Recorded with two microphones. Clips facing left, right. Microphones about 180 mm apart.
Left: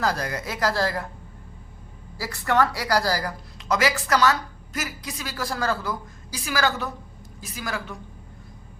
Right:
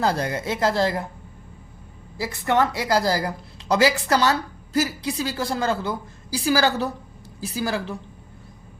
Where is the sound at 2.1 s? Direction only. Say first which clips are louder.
Right 1 dB; 20° right (ahead or behind).